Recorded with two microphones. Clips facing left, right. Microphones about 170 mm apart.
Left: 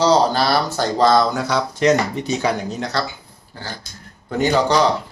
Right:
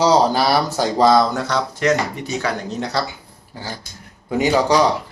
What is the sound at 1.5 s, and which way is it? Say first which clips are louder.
Speech: left 3 dB; 20° left (ahead or behind).